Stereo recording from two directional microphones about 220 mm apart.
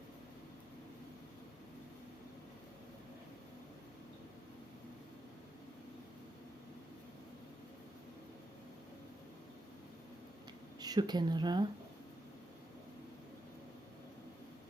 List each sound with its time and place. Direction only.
10.8 s speech: 20° right (ahead or behind)